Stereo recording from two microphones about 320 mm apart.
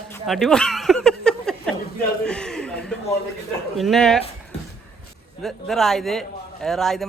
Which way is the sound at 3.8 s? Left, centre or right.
Centre.